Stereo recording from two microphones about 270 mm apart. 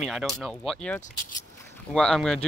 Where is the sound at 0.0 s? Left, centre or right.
Centre.